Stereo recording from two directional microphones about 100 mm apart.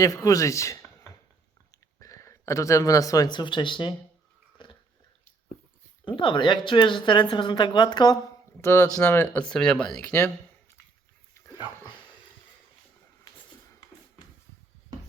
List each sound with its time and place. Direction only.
0.0 s speech: 35° left (ahead or behind); by 3.9 s 50° left (ahead or behind)
4.5 s a sound: 55° left (ahead or behind)
6.1 s speech: 55° left (ahead or behind)
8.6 s speech: 25° left (ahead or behind)
9.4 s speech: 10° left (ahead or behind)